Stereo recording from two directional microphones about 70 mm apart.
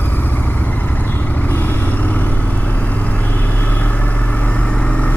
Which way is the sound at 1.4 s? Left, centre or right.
Left.